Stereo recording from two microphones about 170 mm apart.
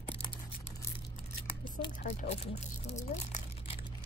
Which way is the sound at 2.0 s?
40° left (ahead or behind).